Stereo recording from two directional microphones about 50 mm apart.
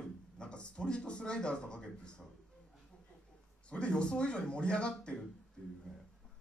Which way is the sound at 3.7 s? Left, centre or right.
Centre.